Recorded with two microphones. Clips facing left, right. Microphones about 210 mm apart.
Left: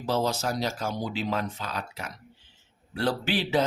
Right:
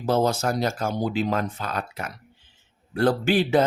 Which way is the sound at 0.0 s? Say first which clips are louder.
Right 5 dB; 50° right (ahead or behind).